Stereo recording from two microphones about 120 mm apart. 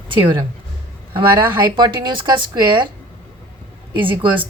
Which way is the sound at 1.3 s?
40° right (ahead or behind).